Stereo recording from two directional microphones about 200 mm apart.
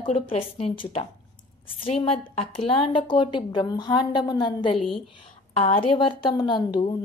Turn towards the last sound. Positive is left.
turn(degrees=25)  # may be behind; listen again after turning